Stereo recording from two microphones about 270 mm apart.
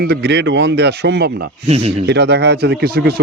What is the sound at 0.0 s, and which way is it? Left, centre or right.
Speech, right.